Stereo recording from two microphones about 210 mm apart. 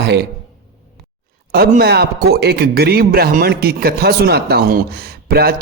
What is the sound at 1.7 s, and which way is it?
A man's voice, 50° right (ahead or behind).